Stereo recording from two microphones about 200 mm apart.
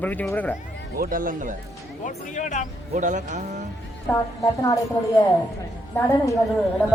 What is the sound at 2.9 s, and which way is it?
Speech, 35° right (ahead or behind).